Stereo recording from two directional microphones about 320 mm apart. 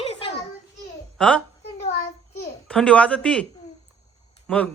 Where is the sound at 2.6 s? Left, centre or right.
Centre.